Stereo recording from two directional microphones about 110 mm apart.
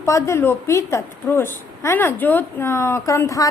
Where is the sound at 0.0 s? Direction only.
25° left (ahead or behind).